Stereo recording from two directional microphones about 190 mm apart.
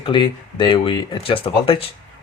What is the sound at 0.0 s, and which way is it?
Speech, 25° left (ahead or behind).